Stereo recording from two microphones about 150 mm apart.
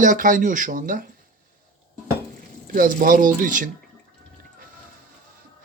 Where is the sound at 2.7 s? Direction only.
65° right (ahead or behind).